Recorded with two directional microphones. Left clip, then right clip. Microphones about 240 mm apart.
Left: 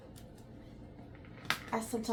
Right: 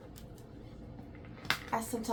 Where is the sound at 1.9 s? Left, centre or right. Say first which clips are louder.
Left 1 dB; centre.